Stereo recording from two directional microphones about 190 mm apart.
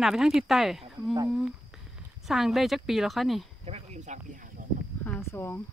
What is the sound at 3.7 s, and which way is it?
Speech, 35° right (ahead or behind).